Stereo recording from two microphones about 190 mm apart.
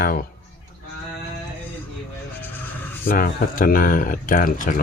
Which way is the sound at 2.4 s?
10° left (ahead or behind).